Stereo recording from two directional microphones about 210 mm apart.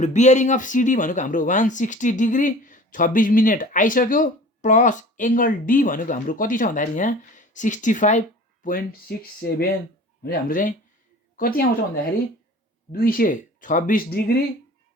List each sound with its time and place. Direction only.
0.0 s speech: 35° left (ahead or behind)
12.9 s speech: 45° left (ahead or behind)